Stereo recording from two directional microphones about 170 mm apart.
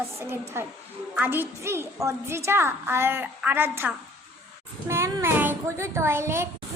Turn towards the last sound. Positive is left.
turn(degrees=-15)  # may be behind; listen again after turning